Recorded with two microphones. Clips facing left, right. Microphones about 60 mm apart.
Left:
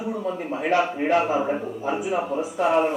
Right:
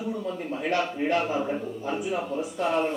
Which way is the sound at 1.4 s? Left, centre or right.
Left.